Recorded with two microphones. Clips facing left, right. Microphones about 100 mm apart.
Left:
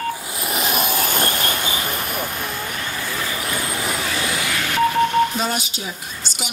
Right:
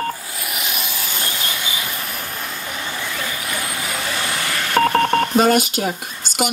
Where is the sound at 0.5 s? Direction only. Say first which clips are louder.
Left 8 dB; 40° left (ahead or behind).